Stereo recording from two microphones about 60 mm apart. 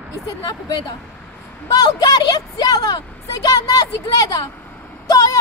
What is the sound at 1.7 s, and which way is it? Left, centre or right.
A woman's voice, left.